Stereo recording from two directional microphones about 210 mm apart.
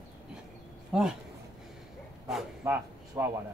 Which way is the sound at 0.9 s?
5° right (ahead or behind).